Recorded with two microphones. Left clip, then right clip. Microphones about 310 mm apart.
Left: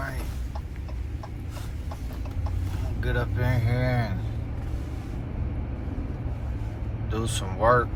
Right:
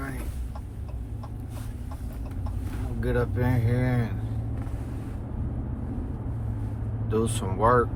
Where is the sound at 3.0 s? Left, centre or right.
Centre.